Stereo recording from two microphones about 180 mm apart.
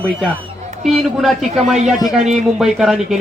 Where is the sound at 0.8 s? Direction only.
Centre (ahead or behind).